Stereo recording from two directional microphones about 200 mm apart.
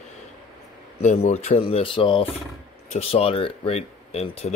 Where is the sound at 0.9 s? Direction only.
30° left (ahead or behind).